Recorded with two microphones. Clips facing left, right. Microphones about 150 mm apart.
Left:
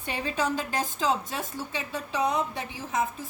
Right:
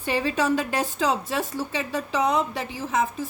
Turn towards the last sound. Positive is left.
turn(degrees=-75)  # may be behind; listen again after turning